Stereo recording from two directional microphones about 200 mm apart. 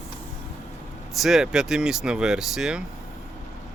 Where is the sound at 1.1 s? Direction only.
Centre (ahead or behind).